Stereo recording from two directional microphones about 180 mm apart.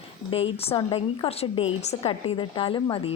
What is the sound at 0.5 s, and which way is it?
A woman's voice, 35° left (ahead or behind).